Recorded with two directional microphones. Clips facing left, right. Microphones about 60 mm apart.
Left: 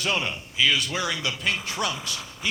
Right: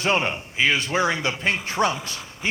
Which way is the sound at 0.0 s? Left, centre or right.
Right.